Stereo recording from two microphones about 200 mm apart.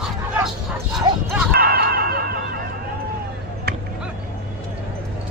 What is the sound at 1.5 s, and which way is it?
Music, 50° right (ahead or behind).